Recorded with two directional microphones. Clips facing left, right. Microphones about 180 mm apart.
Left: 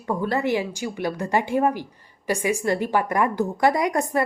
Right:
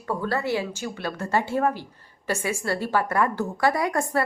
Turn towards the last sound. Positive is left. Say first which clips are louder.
# left 2 dB
turn(degrees=20)  # may be behind; listen again after turning